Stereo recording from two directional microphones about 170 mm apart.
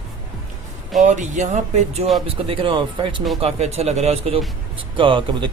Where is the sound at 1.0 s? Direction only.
45° right (ahead or behind).